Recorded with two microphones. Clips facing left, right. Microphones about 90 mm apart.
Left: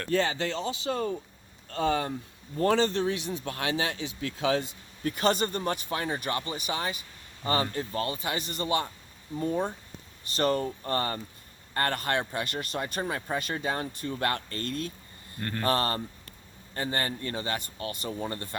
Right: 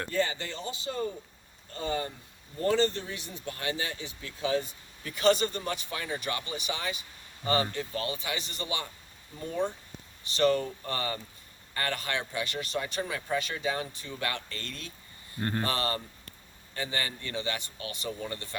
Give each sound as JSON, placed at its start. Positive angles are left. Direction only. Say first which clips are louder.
{"t": 0.1, "sound": "speech", "louder": "left 6 dB", "side_deg": 90}
{"t": 5.0, "sound": "speech", "louder": "right 1 dB", "side_deg": 45}
{"t": 10.2, "sound": "speech", "louder": "right 1 dB", "side_deg": 45}
{"t": 15.4, "sound": "speech", "louder": "right 3 dB", "side_deg": -25}
{"t": 15.6, "sound": "speech", "louder": "left 4 dB", "side_deg": 50}